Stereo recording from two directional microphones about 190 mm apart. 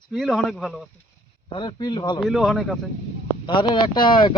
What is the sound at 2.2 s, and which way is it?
Speech, centre (ahead or behind).